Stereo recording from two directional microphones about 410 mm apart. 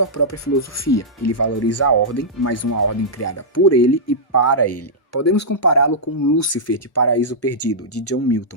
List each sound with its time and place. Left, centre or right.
0.0 s speech: left